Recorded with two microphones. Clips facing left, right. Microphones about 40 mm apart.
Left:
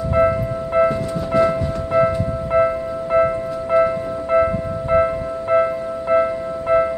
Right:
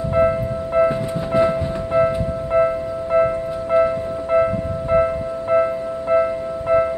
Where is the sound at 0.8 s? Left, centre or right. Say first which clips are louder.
Even; centre.